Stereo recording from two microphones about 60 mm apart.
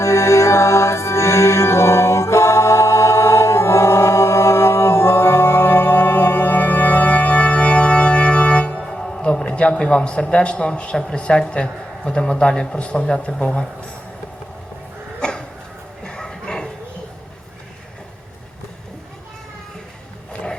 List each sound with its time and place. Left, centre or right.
0.0 s music: left; by 8.8 s centre
8.8 s speech: centre
15.2 s a sound: centre